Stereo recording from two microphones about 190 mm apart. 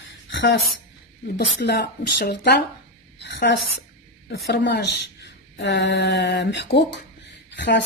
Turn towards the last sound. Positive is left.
turn(degrees=65)  # may be behind; listen again after turning